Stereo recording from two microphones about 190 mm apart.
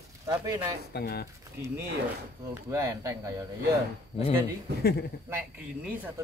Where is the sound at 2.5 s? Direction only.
15° right (ahead or behind).